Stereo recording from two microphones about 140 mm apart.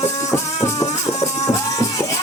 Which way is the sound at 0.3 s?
20° left (ahead or behind).